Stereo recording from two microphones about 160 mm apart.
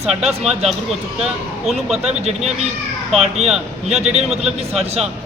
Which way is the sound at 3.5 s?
5° right (ahead or behind).